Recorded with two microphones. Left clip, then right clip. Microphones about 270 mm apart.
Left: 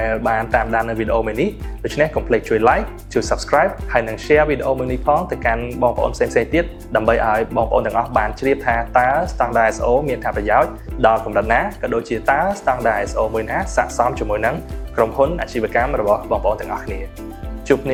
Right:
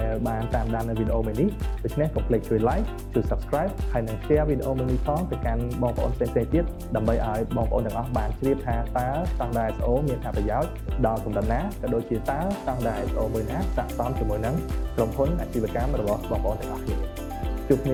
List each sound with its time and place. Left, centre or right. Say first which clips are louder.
0.0 s speech: left 10 dB; centre
4.7 s speech: left 10 dB; left
5.4 s speech: left 11 dB; centre